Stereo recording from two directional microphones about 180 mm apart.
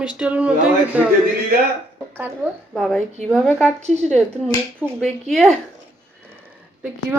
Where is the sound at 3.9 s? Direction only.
40° right (ahead or behind).